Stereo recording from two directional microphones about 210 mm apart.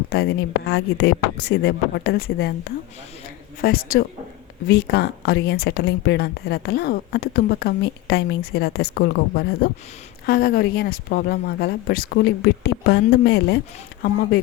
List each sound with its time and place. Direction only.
0.1 s speech: 50° left (ahead or behind)